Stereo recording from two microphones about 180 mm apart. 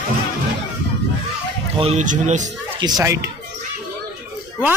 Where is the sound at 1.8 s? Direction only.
40° right (ahead or behind).